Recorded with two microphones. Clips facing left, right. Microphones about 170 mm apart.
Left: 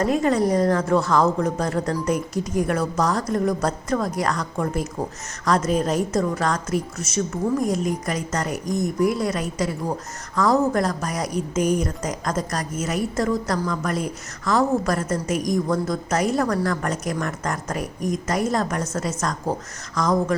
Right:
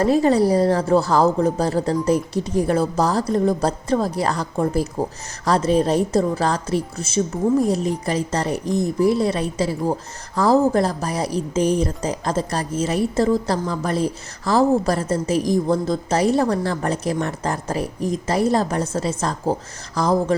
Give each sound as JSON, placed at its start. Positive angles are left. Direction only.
{"t": 0.0, "sound": "a woman's voice", "side_deg": -35}